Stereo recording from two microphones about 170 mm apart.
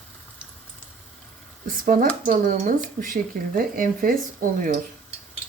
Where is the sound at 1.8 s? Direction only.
55° right (ahead or behind).